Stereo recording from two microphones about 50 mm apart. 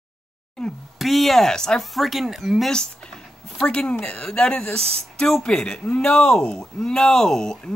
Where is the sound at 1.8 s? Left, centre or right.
Centre.